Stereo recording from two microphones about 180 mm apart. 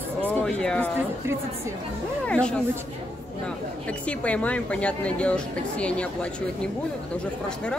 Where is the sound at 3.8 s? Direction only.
5° left (ahead or behind).